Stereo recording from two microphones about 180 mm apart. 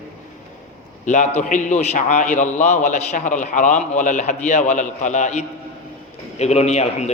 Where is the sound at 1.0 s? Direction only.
40° left (ahead or behind).